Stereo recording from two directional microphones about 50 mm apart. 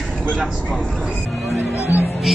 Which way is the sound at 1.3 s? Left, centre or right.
Centre.